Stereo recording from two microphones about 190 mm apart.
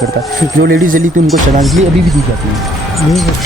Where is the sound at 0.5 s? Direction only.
50° right (ahead or behind).